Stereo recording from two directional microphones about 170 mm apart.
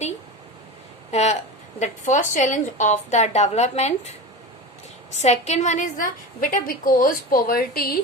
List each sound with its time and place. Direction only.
1.1 s a woman's voice: 40° left (ahead or behind)
5.2 s a woman's voice: 40° left (ahead or behind); by 7.9 s 60° left (ahead or behind)